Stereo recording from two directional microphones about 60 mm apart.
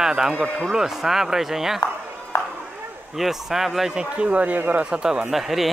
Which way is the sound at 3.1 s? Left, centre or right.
Centre.